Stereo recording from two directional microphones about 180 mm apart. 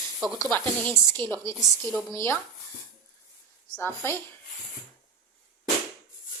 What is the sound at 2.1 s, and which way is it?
Speech, 15° left (ahead or behind).